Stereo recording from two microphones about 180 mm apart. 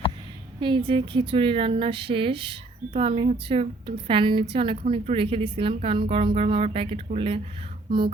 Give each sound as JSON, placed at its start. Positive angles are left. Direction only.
{"t": 0.6, "sound": "a woman's voice", "side_deg": -30}